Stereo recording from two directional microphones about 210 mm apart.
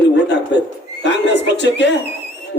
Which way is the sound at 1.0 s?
55° left (ahead or behind).